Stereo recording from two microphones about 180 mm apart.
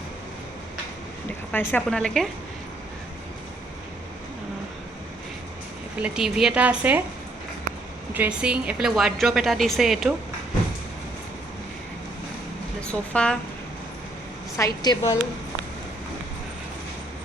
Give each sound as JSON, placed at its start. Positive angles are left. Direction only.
{"t": 1.5, "sound": "a woman's voice", "side_deg": 10}
{"t": 6.0, "sound": "a woman's voice", "side_deg": -5}
{"t": 8.1, "sound": "a woman's voice", "side_deg": -10}
{"t": 12.9, "sound": "a woman's voice", "side_deg": 5}
{"t": 14.6, "sound": "a woman's voice", "side_deg": 20}